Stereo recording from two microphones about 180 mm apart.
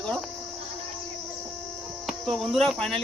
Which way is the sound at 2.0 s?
Centre (ahead or behind).